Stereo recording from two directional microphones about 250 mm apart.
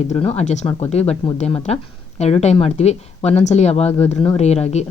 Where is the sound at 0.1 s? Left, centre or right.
Left.